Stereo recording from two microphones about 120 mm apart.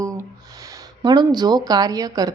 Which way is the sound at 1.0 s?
35° right (ahead or behind).